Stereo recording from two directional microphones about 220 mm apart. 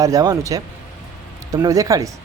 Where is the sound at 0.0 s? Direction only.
15° right (ahead or behind).